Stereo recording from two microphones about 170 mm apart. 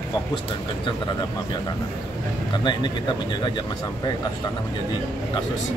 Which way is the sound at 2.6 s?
25° left (ahead or behind).